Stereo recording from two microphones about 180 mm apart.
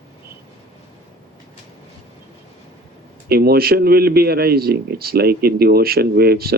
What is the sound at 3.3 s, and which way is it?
A man's voice, 60° right (ahead or behind).